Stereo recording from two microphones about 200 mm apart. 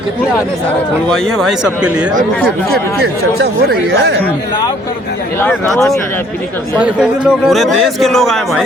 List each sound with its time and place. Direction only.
1.1 s a man's voice: centre (ahead or behind)
3.0 s speech: 50° right (ahead or behind)
5.4 s a man's voice: 5° left (ahead or behind)